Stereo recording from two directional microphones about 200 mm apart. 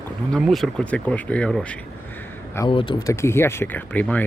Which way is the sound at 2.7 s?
25° left (ahead or behind).